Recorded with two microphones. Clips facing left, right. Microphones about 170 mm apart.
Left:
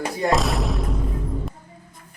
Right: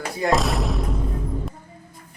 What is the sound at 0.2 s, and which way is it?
Music, centre (ahead or behind).